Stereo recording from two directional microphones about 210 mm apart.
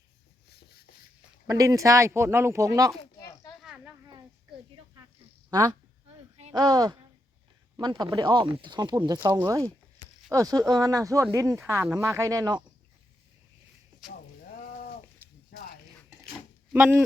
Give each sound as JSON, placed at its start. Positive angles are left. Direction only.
{"t": 0.4, "sound": "writing", "side_deg": 50}
{"t": 1.5, "sound": "speech", "side_deg": -15}
{"t": 3.6, "sound": "snake", "side_deg": 0}
{"t": 5.5, "sound": "speech", "side_deg": -15}
{"t": 16.7, "sound": "speech", "side_deg": -5}